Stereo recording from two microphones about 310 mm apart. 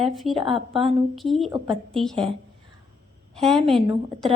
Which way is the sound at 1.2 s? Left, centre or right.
Centre.